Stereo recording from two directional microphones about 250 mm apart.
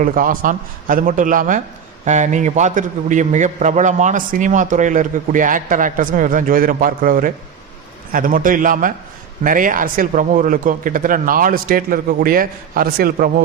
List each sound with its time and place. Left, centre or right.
0.0 s a man's voice: right